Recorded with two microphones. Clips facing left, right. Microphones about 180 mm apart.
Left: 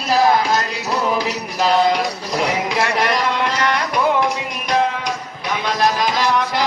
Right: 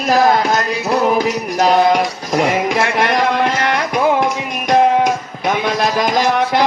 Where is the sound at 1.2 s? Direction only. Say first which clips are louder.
Right 5 dB; 50° right (ahead or behind).